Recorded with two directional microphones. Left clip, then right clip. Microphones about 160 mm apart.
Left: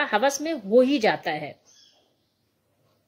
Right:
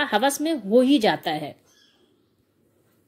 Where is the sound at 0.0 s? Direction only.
20° right (ahead or behind).